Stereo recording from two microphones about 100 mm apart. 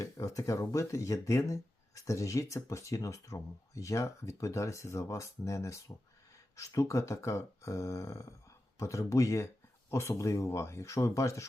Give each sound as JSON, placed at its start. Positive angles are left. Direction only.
{"t": 0.0, "sound": "speech", "side_deg": 35}